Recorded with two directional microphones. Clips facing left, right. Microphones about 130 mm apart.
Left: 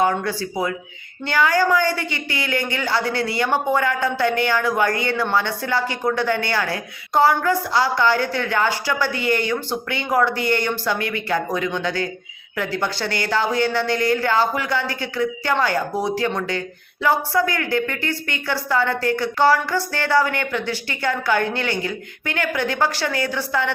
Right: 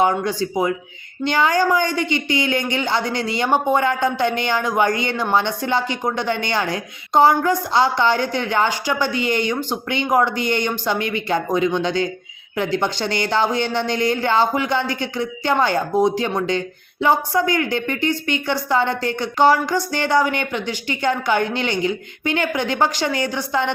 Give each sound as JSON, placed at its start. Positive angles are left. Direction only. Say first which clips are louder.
{"t": 0.0, "sound": "speech", "louder": "right 2 dB", "side_deg": -20}